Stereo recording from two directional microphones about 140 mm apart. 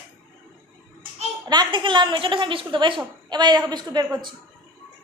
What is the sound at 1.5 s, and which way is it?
A woman's voice, 35° right (ahead or behind).